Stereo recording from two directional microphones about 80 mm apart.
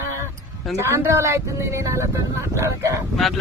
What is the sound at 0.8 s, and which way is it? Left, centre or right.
Speech, right.